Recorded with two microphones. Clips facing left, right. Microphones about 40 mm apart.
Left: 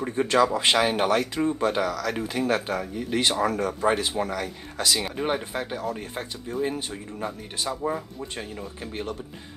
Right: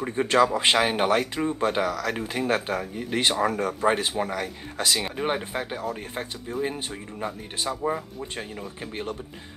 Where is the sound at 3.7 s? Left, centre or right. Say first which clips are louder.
Even; centre.